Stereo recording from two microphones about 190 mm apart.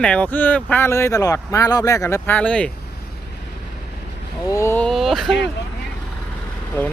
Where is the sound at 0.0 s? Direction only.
5° left (ahead or behind).